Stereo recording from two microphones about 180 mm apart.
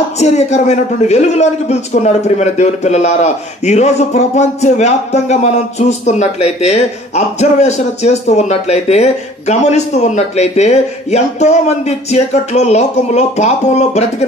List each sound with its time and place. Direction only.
0.2 s a man's voice: 40° left (ahead or behind)